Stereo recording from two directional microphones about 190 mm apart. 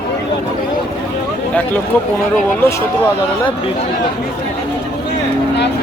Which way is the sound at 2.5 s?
15° left (ahead or behind).